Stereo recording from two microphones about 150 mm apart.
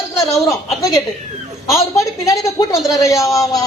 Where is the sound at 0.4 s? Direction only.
25° left (ahead or behind).